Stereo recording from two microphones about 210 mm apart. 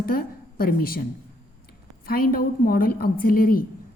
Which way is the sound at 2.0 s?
45° left (ahead or behind).